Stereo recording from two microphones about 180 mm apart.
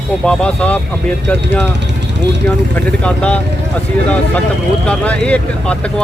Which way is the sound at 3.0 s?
5° left (ahead or behind).